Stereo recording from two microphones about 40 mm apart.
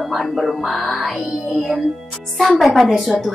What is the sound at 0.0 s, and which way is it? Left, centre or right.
Speech, centre.